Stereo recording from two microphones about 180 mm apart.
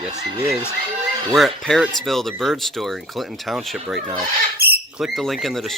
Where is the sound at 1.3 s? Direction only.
Centre (ahead or behind).